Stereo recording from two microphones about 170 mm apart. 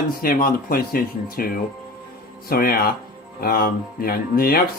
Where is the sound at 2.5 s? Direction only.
60° left (ahead or behind).